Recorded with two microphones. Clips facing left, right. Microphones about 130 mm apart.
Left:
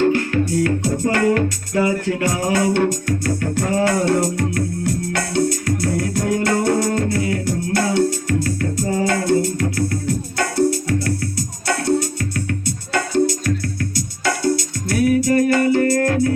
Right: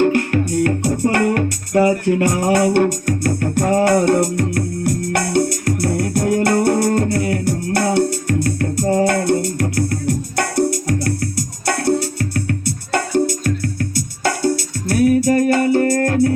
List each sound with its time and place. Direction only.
0.1 s music: 55° right (ahead or behind)
12.9 s music: 50° right (ahead or behind)